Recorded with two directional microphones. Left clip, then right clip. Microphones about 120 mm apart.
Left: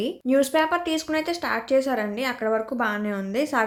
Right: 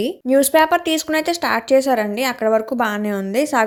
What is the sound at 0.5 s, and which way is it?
Speech, 70° right (ahead or behind).